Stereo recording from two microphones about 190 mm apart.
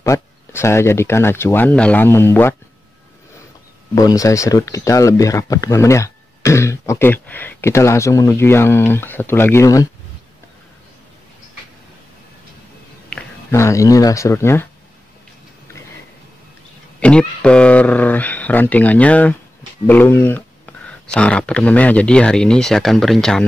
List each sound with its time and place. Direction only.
0.0 s speech: 15° left (ahead or behind)
3.9 s speech: 20° left (ahead or behind)
13.1 s speech: 15° left (ahead or behind)
17.0 s speech: 5° left (ahead or behind)